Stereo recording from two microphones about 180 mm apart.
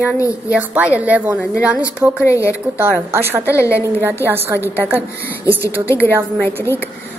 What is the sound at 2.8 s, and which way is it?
Speech, 10° right (ahead or behind).